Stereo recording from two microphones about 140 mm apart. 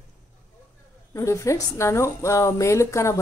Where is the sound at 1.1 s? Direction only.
20° left (ahead or behind).